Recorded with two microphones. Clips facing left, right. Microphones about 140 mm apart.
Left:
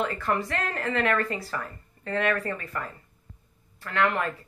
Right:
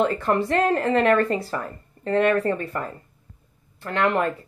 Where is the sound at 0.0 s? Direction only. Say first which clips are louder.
Right 6 dB; 30° right (ahead or behind).